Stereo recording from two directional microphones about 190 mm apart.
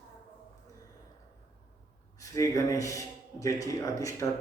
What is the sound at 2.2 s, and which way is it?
A man's voice, 15° left (ahead or behind).